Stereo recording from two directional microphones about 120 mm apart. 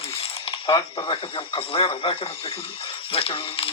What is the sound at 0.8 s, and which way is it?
Speech, 40° left (ahead or behind).